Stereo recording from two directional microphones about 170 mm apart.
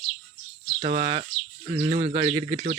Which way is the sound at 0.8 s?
35° right (ahead or behind).